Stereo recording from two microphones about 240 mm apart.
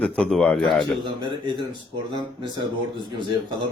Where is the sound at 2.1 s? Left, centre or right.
Centre.